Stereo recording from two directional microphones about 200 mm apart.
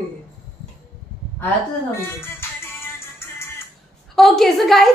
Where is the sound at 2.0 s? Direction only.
10° left (ahead or behind).